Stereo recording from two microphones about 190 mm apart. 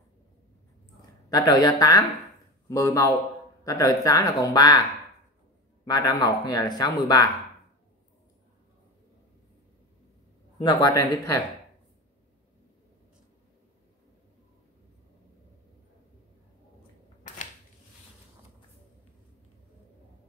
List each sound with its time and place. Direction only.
1.3 s a man's voice: 20° left (ahead or behind)
5.9 s speech: 20° left (ahead or behind)
10.6 s speech: 20° left (ahead or behind)